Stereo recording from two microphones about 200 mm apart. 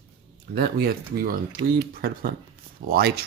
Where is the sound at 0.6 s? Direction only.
50° right (ahead or behind).